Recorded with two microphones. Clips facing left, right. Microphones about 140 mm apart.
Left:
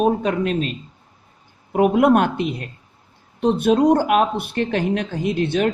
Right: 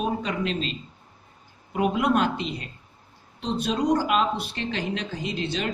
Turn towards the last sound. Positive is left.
turn(degrees=55)  # may be behind; listen again after turning